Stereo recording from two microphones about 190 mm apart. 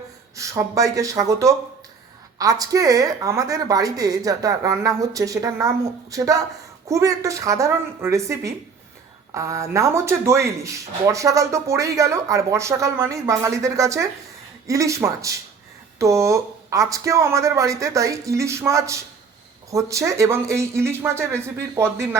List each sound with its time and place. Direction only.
0.3 s speech: 15° right (ahead or behind)